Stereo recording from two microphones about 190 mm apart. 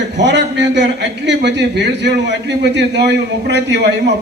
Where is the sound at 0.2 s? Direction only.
65° right (ahead or behind).